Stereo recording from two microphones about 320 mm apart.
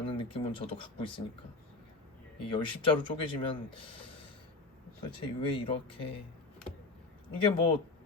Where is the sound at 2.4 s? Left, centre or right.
Centre.